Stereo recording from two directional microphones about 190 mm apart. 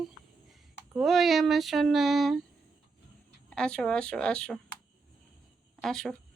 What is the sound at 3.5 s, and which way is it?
A woman's voice, 5° left (ahead or behind).